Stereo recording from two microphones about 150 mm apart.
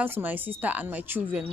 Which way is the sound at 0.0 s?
10° right (ahead or behind).